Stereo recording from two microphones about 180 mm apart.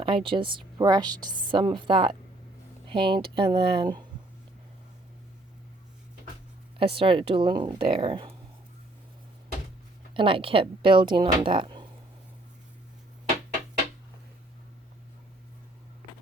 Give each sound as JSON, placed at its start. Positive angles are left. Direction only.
{"t": 0.0, "sound": "a woman's voice", "side_deg": -30}
{"t": 6.7, "sound": "a woman's voice", "side_deg": -30}
{"t": 10.2, "sound": "a woman's voice", "side_deg": -30}